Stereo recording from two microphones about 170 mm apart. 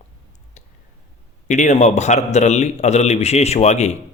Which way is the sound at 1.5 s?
45° left (ahead or behind).